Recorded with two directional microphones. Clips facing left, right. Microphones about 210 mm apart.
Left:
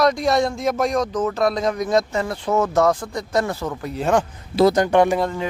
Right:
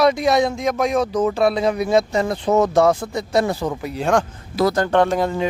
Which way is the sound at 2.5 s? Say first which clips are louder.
Right 3 dB; 35° right (ahead or behind).